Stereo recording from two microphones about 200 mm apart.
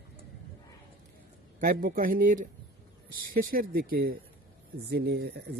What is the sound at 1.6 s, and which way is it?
A man's voice, 45° right (ahead or behind).